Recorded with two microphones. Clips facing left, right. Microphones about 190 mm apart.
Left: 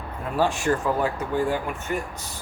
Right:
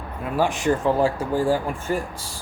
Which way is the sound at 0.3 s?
15° right (ahead or behind).